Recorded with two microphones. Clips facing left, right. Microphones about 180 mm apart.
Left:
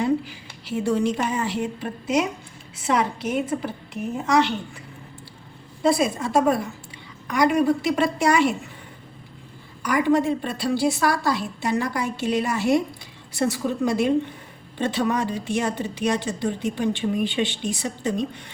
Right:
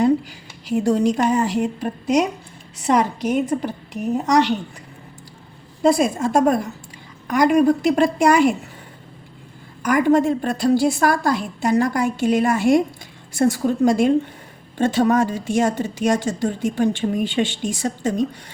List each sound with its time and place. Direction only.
0.0 s a woman's voice: 45° right (ahead or behind)
5.8 s speech: 45° right (ahead or behind)
9.8 s speech: 50° right (ahead or behind)